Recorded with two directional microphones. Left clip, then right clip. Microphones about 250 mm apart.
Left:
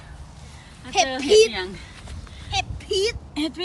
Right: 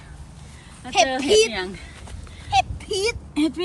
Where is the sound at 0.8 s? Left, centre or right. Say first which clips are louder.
Right 1 dB; centre.